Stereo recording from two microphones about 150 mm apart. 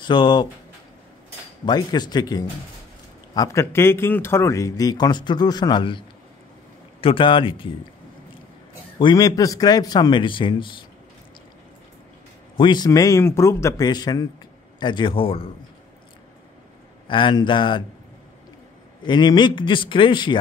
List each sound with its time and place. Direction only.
0.0 s a man's voice: 30° left (ahead or behind)
1.7 s a man's voice: 30° left (ahead or behind)
8.9 s speech: 30° left (ahead or behind)
12.5 s a man's voice: 30° left (ahead or behind)
17.1 s a man's voice: 30° left (ahead or behind)
19.0 s a man's voice: 30° left (ahead or behind)